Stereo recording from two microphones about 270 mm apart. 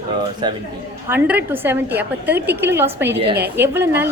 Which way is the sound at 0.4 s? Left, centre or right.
Centre.